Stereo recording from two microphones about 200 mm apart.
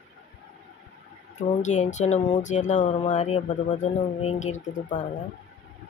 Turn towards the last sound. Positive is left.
turn(degrees=35)  # may be behind; listen again after turning